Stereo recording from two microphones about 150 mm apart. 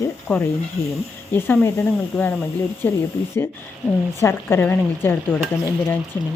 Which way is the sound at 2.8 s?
10° left (ahead or behind).